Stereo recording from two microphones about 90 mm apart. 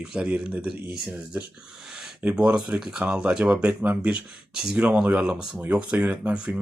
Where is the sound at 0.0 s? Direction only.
10° right (ahead or behind).